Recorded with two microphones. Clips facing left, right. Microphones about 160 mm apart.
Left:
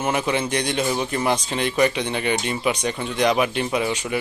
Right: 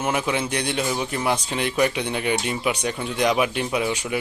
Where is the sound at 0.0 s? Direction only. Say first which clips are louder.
Left 1 dB; 5° right (ahead or behind).